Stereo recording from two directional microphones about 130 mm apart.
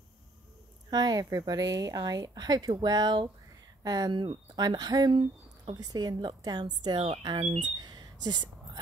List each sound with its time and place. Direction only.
0.8 s speech: 30° right (ahead or behind)